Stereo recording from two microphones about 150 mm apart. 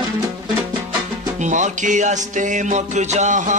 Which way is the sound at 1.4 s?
55° right (ahead or behind).